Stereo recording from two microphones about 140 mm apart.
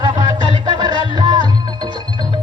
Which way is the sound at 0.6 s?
30° right (ahead or behind).